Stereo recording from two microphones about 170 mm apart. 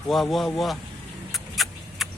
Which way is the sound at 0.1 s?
Centre (ahead or behind).